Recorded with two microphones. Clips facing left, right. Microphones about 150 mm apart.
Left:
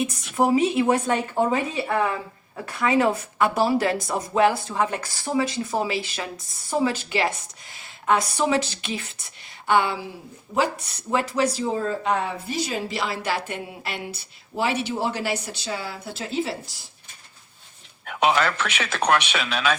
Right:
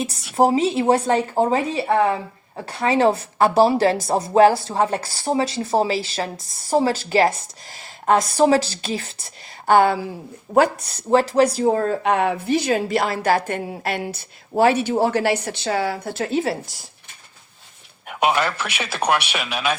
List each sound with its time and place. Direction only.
0.3 s speech: 35° right (ahead or behind)
10.5 s speech: 65° right (ahead or behind)
11.1 s speech: 35° right (ahead or behind)
11.5 s speech: 55° right (ahead or behind); by 16.0 s 80° right
16.0 s speech: 55° right (ahead or behind)
18.0 s a man's voice: 10° right (ahead or behind)